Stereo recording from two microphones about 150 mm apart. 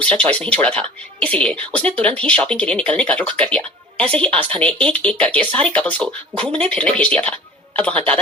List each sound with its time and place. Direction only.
0.0 s a woman's voice: 10° left (ahead or behind)
6.4 s speech: 40° right (ahead or behind)
6.7 s a woman's voice: 10° left (ahead or behind)